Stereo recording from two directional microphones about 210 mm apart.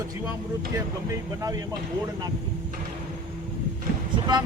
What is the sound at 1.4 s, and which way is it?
Speech, 15° right (ahead or behind).